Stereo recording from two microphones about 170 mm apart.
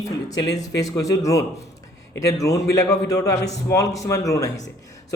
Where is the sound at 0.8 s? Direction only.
20° left (ahead or behind).